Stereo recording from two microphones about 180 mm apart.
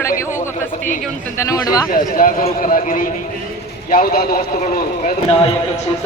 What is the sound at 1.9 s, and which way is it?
A man's voice, 50° left (ahead or behind).